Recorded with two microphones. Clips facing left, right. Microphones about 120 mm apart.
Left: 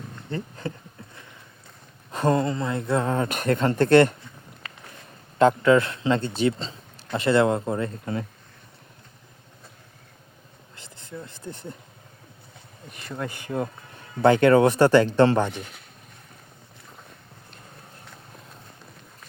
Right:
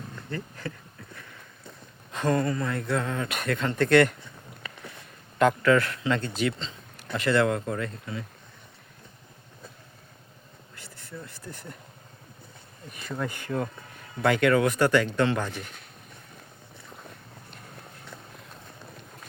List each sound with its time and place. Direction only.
0.3 s speech: 25° left (ahead or behind)
2.1 s speech: 30° left (ahead or behind)
5.4 s speech: 25° left (ahead or behind)
10.8 s a sound: 20° left (ahead or behind)
13.1 s speech: 20° left (ahead or behind)